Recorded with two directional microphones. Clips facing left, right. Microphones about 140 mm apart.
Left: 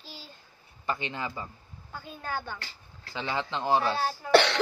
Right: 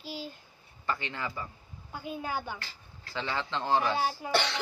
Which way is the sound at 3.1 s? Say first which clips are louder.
Left 2 dB; 15° left (ahead or behind).